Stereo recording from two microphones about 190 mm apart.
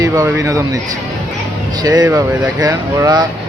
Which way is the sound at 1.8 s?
20° right (ahead or behind).